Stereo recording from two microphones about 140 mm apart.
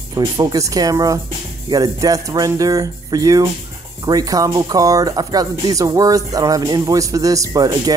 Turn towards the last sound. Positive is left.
turn(degrees=-25)  # may be behind; listen again after turning